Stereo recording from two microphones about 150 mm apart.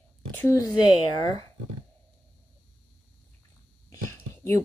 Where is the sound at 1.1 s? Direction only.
35° right (ahead or behind).